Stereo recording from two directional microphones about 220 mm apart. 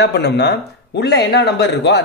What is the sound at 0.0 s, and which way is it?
Speech, 50° left (ahead or behind).